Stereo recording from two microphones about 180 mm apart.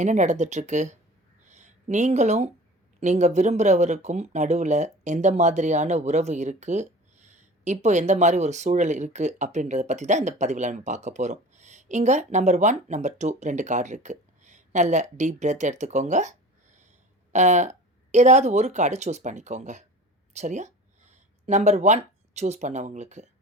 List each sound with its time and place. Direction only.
0.0 s speech: 40° right (ahead or behind)
1.5 s a sound: 40° right (ahead or behind)
3.0 s speech: 40° right (ahead or behind)
17.3 s speech: 40° right (ahead or behind)